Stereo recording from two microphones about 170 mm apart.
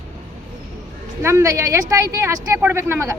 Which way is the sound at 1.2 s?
15° right (ahead or behind).